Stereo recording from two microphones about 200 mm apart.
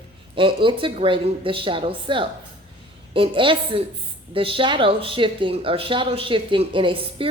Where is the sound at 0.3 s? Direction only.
25° right (ahead or behind).